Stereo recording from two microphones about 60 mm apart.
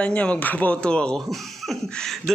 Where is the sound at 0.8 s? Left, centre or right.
Centre.